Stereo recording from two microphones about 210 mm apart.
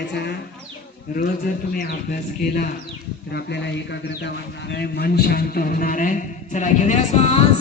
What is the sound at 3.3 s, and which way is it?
A man's voice, 50° left (ahead or behind).